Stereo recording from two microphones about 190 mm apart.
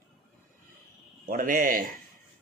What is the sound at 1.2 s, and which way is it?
Speech, 45° right (ahead or behind).